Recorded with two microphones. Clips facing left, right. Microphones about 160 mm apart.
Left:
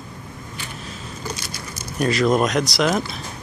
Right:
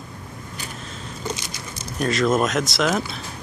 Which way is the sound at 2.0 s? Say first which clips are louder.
Left 2 dB; centre (ahead or behind).